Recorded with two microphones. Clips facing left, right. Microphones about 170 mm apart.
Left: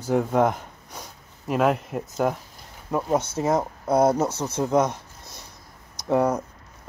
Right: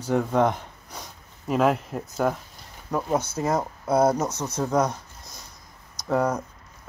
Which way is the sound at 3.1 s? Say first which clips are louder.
Left 2 dB; 25° left (ahead or behind).